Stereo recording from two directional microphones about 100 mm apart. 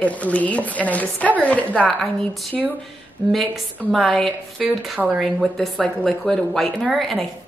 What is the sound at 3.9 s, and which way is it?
A woman's voice, 5° left (ahead or behind).